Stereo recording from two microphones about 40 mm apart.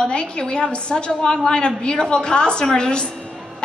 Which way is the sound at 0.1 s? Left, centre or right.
Left.